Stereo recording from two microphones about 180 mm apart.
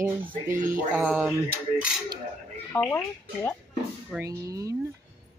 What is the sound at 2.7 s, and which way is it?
Speech, 10° left (ahead or behind).